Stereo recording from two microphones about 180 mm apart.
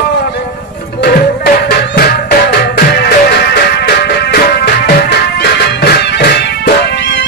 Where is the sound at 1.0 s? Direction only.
60° left (ahead or behind).